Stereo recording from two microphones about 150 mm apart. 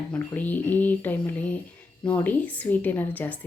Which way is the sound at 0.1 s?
10° left (ahead or behind).